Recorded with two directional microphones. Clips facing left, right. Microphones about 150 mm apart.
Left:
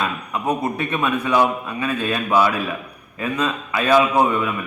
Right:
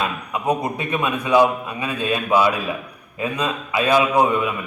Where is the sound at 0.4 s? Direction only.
15° right (ahead or behind).